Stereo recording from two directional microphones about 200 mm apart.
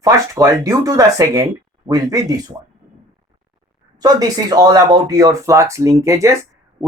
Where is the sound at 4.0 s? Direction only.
20° right (ahead or behind).